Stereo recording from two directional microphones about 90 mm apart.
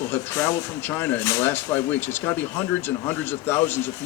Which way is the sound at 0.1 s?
25° left (ahead or behind).